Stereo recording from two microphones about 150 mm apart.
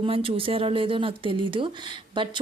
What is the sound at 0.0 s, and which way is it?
Speech, 35° right (ahead or behind).